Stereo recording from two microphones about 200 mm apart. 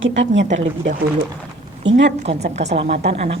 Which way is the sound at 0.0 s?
65° right (ahead or behind).